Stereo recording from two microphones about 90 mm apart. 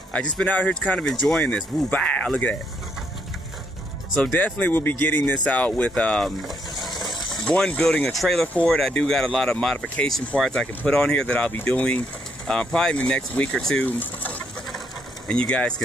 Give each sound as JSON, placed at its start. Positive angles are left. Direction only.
{"t": 0.1, "sound": "speech", "side_deg": 15}
{"t": 4.2, "sound": "speech", "side_deg": 10}
{"t": 7.4, "sound": "speech", "side_deg": 10}
{"t": 13.8, "sound": "speech", "side_deg": 20}
{"t": 15.2, "sound": "speech", "side_deg": 10}